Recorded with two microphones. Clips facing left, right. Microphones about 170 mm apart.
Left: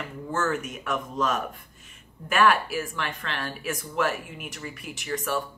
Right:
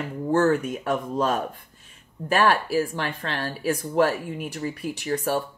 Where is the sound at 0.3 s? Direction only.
35° right (ahead or behind).